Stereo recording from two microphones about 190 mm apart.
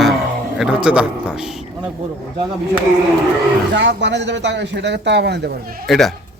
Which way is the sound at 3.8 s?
70° right (ahead or behind).